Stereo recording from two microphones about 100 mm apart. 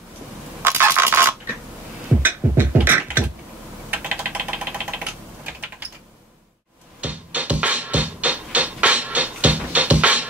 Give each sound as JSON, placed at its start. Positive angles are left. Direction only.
{"t": 0.6, "sound": "a sound", "side_deg": -25}
{"t": 2.2, "sound": "beatboxing", "side_deg": -20}
{"t": 3.9, "sound": "typing", "side_deg": -15}
{"t": 7.0, "sound": "music", "side_deg": -15}